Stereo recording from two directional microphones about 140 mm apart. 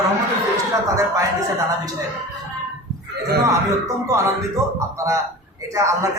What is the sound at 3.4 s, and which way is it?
A man's voice, 25° right (ahead or behind).